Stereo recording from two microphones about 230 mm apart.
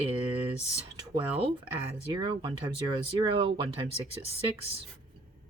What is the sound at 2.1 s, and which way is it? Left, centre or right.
Speech, centre.